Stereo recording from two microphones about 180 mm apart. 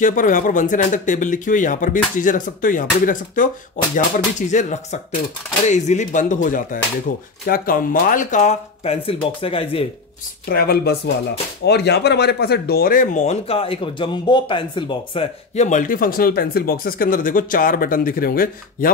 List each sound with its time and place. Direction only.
0.0 s speech: 45° left (ahead or behind); by 9.8 s 30° left (ahead or behind)
10.5 s speech: 60° left (ahead or behind); by 15.2 s 25° left (ahead or behind)
15.5 s speech: 40° left (ahead or behind)